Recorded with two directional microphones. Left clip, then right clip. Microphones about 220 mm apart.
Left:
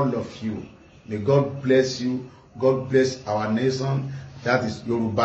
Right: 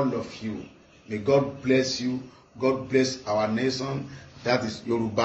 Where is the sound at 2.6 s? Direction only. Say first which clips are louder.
Left 4 dB; 15° left (ahead or behind).